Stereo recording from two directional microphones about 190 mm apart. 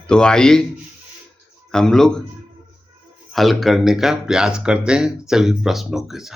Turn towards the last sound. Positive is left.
turn(degrees=0)  # may be behind; listen again after turning